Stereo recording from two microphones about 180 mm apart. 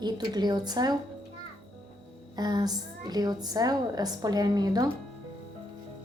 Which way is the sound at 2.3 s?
20° right (ahead or behind).